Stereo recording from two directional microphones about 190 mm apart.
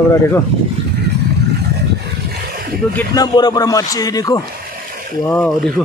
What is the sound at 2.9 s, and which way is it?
A man's voice, 20° left (ahead or behind).